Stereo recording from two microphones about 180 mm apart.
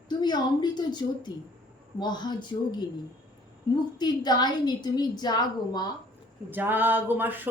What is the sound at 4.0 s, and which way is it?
A woman's voice, 25° left (ahead or behind).